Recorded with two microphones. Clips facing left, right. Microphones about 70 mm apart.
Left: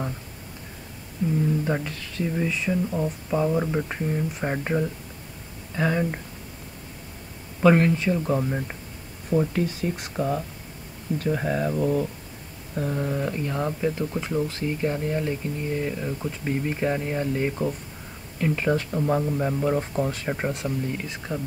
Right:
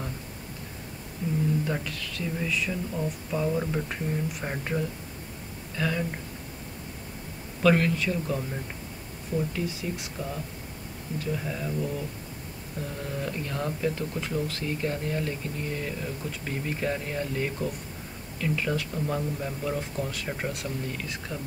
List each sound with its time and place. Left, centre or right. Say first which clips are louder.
1.6 s speech: left 4 dB; left
7.6 s speech: left 4 dB; left
12.7 s speech: left 8 dB; left